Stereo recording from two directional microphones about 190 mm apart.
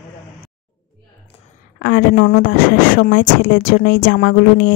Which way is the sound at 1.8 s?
55° left (ahead or behind).